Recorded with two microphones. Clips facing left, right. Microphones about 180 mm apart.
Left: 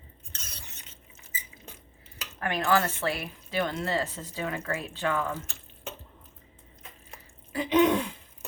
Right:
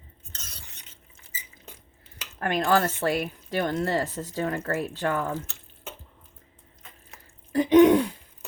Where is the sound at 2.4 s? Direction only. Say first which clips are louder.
Right 3 dB; 50° right (ahead or behind).